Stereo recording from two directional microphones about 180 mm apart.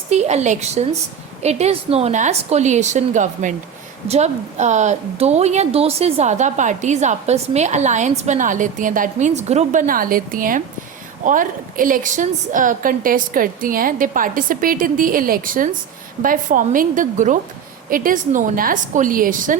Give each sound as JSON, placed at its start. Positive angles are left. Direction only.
{"t": 0.1, "sound": "a woman's voice", "side_deg": -40}